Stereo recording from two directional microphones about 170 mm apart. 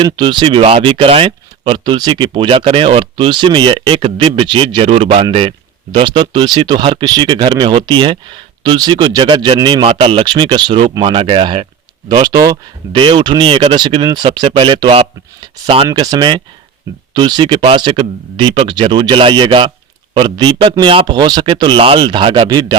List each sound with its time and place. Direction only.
0.0 s speech: 25° right (ahead or behind)
15.9 s speech: 25° right (ahead or behind)